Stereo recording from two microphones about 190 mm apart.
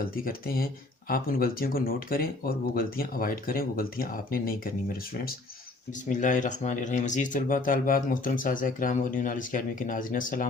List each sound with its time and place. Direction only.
0.0 s speech: 50° left (ahead or behind)
6.1 s speech: 40° left (ahead or behind)